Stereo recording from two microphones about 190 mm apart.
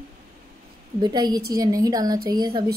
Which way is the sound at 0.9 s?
20° right (ahead or behind).